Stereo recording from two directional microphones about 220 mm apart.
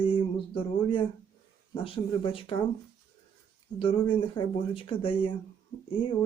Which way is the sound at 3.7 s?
25° left (ahead or behind).